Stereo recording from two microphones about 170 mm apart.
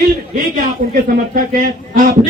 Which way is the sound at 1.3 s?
50° right (ahead or behind).